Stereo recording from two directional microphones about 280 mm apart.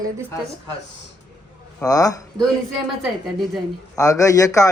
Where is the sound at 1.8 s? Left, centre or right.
Centre.